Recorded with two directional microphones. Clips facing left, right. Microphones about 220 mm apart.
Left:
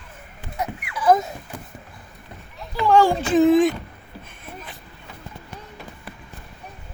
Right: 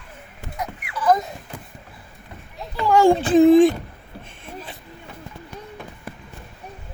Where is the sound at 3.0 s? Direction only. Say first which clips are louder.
Right 3 dB; 30° right (ahead or behind).